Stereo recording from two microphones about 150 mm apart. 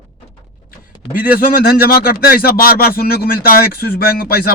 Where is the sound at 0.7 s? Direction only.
75° left (ahead or behind).